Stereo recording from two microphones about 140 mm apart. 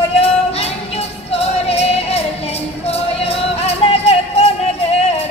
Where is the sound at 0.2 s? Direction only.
50° left (ahead or behind).